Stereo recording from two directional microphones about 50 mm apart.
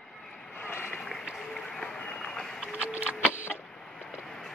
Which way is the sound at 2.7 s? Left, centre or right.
Right.